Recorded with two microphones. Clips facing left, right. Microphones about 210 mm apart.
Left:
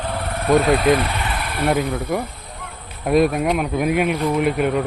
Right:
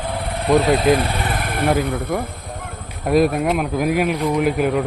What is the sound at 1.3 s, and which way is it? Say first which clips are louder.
Vehicle: right 2 dB; 50° right (ahead or behind).